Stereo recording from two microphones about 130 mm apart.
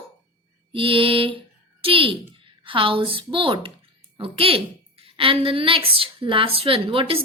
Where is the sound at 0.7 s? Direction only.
45° right (ahead or behind).